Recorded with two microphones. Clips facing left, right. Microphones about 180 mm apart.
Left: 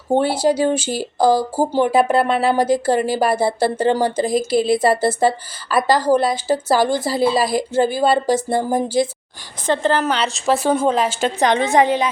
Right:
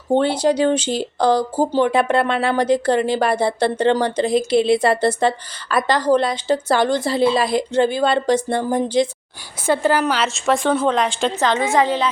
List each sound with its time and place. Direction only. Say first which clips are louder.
0.1 s a woman's voice: even; 10° left (ahead or behind)
9.6 s a woman's voice: even; 10° right (ahead or behind)
11.3 s speech: left 3 dB; 15° left (ahead or behind)